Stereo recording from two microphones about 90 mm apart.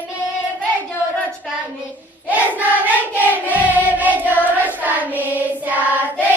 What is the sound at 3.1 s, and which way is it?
Choir, 20° right (ahead or behind).